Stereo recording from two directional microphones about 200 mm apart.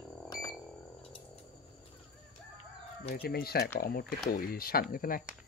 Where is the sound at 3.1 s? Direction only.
50° left (ahead or behind).